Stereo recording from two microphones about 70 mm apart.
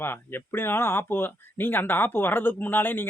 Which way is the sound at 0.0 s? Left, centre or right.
Left.